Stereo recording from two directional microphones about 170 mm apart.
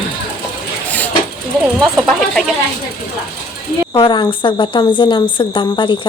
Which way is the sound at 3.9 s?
25° left (ahead or behind).